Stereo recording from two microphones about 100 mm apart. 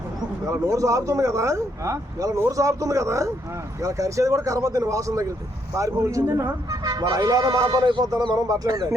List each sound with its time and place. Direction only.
0.4 s speech: 30° right (ahead or behind)